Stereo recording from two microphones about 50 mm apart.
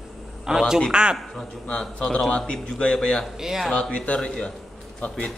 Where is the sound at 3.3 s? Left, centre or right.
Centre.